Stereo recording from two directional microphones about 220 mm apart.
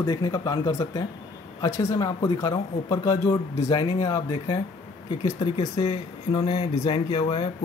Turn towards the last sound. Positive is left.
turn(degrees=20)  # may be behind; listen again after turning